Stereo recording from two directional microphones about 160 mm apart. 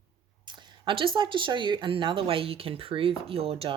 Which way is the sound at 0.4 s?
30° right (ahead or behind).